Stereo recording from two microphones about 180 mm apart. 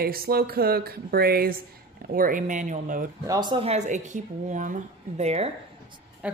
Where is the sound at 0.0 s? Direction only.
55° right (ahead or behind).